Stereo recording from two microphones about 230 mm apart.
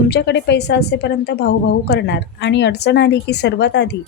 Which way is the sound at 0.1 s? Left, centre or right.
Left.